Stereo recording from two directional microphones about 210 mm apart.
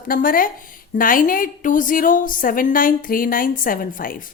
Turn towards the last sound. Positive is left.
turn(degrees=40)  # may be behind; listen again after turning